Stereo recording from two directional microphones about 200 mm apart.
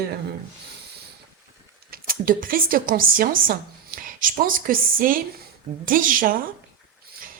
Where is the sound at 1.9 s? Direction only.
45° right (ahead or behind).